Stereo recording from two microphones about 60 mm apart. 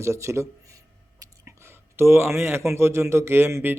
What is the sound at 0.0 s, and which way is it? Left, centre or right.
Speech, right.